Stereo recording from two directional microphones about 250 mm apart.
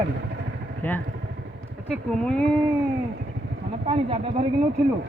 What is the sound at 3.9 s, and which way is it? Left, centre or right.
Speech, right.